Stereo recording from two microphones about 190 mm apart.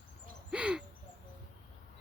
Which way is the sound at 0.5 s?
5° right (ahead or behind).